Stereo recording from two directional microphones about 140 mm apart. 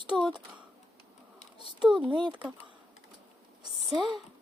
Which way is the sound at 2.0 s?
35° right (ahead or behind).